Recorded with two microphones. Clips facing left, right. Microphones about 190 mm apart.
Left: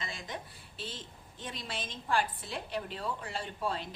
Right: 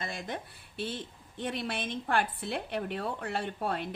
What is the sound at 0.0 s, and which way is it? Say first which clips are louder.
A woman's voice: right 4 dB; 55° right (ahead or behind).